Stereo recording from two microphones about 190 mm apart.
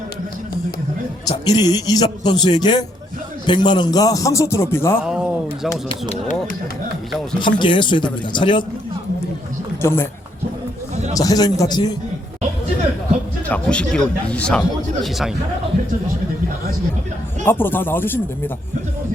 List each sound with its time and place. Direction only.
1.5 s a man's voice: 20° left (ahead or behind)
4.9 s speech: 5° right (ahead or behind)
7.3 s speech: 25° left (ahead or behind)
9.8 s a man's voice: 10° left (ahead or behind)
11.1 s speech: 20° left (ahead or behind)
13.5 s speech: 5° left (ahead or behind)
17.4 s a man's voice: 10° left (ahead or behind)